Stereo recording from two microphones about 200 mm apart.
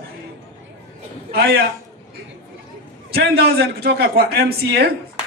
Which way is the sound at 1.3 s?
50° right (ahead or behind).